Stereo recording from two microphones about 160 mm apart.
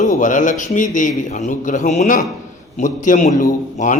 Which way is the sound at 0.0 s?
50° left (ahead or behind).